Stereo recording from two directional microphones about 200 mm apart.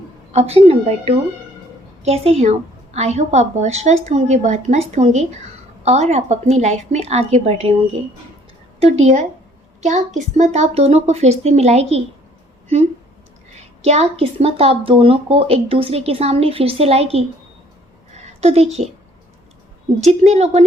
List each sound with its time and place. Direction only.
0.3 s a woman's voice: 30° right (ahead or behind)
8.8 s a woman's voice: 30° right (ahead or behind)
13.8 s speech: 30° right (ahead or behind)
18.3 s a woman's voice: 30° right (ahead or behind)
20.0 s a woman's voice: 35° right (ahead or behind)